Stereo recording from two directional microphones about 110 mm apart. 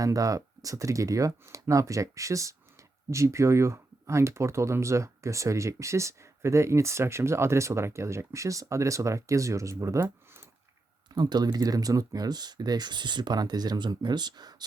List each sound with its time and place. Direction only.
0.0 s speech: 30° right (ahead or behind)
11.1 s speech: 40° right (ahead or behind)